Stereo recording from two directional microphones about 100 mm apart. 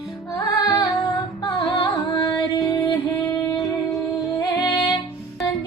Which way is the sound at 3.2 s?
35° left (ahead or behind).